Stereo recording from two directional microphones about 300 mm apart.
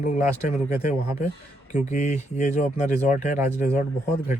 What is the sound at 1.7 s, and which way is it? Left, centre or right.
Speech, left.